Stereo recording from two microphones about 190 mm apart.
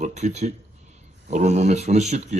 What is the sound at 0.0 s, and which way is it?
A man's voice, 40° right (ahead or behind).